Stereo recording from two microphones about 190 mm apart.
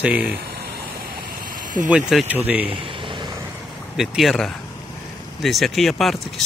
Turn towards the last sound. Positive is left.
turn(degrees=0)  # may be behind; listen again after turning